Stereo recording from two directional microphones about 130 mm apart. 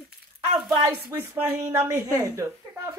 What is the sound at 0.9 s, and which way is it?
A woman's voice, 15° right (ahead or behind).